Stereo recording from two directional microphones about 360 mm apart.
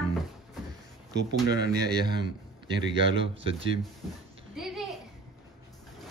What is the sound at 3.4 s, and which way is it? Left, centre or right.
Speech, centre.